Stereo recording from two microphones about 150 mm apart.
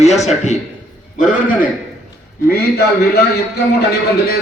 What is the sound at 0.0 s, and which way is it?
Speech, 50° left (ahead or behind).